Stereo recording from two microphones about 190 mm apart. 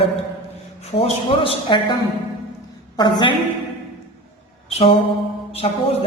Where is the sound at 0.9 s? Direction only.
30° left (ahead or behind).